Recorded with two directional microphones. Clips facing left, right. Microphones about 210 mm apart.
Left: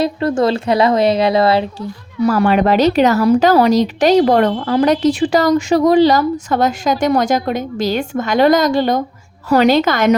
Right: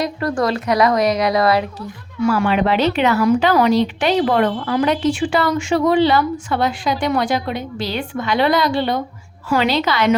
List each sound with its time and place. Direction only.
0.0 s a woman's voice: 25° left (ahead or behind)
2.2 s a woman's voice: 40° left (ahead or behind)